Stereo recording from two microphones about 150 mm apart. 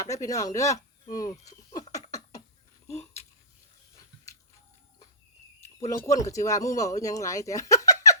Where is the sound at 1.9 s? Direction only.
20° left (ahead or behind).